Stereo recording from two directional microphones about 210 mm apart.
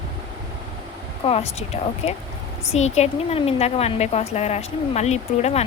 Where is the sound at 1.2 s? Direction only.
30° left (ahead or behind).